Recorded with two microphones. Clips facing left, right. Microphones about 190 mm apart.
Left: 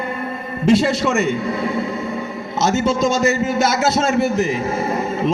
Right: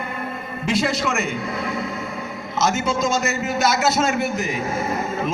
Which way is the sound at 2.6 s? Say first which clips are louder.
Left 4 dB; 35° left (ahead or behind).